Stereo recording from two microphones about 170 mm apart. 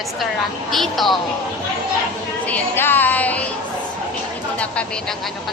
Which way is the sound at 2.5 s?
10° left (ahead or behind).